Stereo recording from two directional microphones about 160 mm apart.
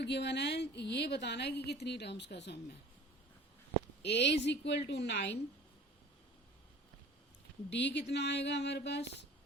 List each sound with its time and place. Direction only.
0.0 s a woman's voice: 90° left
4.0 s a woman's voice: 90° left
7.7 s a woman's voice: 90° left